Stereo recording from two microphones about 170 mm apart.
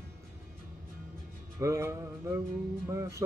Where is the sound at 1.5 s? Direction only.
20° right (ahead or behind).